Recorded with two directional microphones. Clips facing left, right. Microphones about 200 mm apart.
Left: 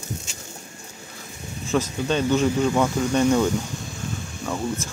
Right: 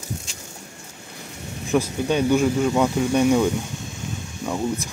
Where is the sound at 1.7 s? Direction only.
10° right (ahead or behind).